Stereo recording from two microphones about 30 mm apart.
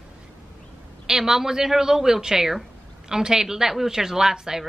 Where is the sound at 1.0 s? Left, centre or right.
Centre.